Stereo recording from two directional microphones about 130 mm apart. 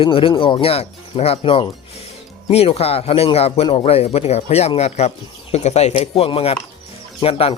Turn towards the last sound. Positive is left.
turn(degrees=45)  # may be behind; listen again after turning